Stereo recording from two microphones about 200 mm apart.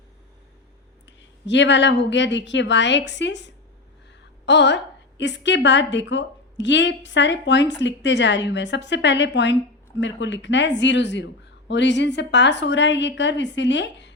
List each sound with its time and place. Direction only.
1.5 s a woman's voice: 65° left (ahead or behind)